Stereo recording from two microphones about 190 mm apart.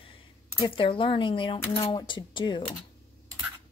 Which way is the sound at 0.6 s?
25° left (ahead or behind).